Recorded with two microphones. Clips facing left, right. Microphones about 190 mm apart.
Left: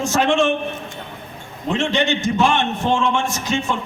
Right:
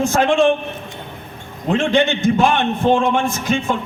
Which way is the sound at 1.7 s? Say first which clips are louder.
Right 4 dB; 55° right (ahead or behind).